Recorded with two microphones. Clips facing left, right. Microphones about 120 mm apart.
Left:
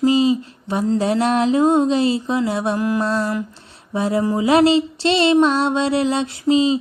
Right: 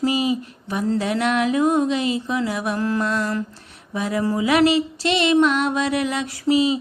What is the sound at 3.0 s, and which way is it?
Mantra, 30° left (ahead or behind).